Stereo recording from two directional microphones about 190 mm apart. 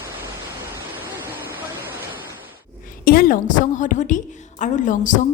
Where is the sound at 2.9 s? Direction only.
50° left (ahead or behind).